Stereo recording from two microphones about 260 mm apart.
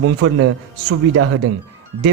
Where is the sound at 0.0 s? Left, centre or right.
Right.